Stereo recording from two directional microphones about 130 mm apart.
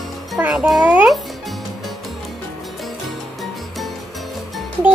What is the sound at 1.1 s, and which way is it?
Music, centre (ahead or behind).